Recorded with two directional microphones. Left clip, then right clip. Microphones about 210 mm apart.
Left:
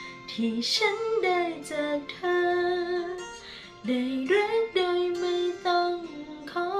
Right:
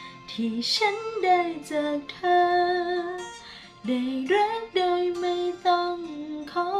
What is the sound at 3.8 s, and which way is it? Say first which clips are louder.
Female singing: right 1 dB; 5° left (ahead or behind).